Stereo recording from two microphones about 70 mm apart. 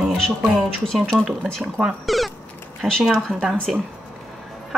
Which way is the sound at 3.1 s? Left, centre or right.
Centre.